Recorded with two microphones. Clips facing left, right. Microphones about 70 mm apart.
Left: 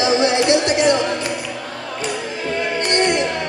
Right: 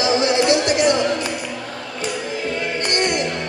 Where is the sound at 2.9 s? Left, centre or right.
Left.